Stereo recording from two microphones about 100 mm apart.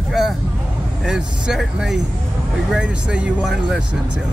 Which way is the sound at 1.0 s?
5° right (ahead or behind).